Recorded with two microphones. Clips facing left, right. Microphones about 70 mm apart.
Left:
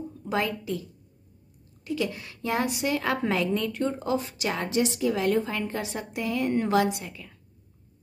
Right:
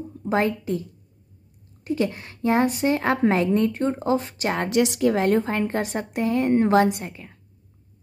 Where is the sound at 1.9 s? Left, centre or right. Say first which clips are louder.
Right 5 dB; right.